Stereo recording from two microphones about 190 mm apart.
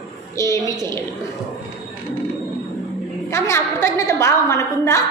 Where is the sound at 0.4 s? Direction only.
15° left (ahead or behind).